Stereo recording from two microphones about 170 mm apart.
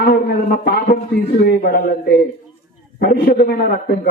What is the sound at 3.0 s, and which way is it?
Speech, 65° left (ahead or behind).